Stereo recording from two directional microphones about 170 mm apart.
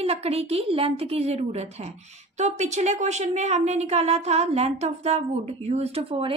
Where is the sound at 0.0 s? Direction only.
35° right (ahead or behind).